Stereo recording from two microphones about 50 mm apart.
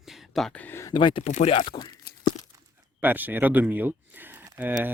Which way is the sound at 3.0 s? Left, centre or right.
Right.